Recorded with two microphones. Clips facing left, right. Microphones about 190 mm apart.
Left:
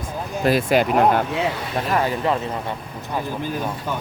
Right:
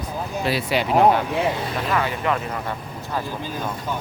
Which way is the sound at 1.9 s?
35° left (ahead or behind).